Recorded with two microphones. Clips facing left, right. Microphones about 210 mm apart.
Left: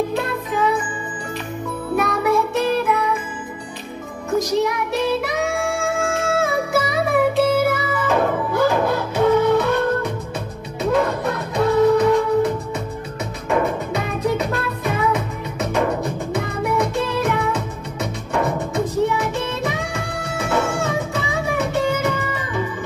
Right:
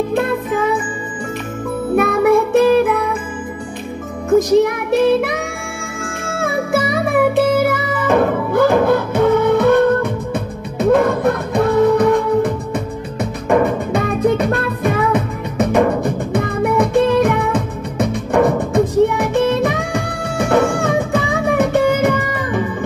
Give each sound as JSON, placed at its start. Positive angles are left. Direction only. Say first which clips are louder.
{"t": 0.1, "sound": "music", "louder": "right 6 dB", "side_deg": -55}
{"t": 2.0, "sound": "music", "louder": "right 6 dB", "side_deg": -55}
{"t": 4.4, "sound": "music", "louder": "right 6 dB", "side_deg": -55}